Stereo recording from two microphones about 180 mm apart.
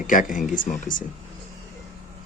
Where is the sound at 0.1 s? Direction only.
45° left (ahead or behind).